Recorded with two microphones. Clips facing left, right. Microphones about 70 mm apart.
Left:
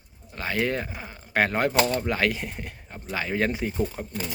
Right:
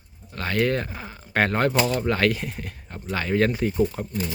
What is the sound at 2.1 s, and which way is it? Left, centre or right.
Speech, centre.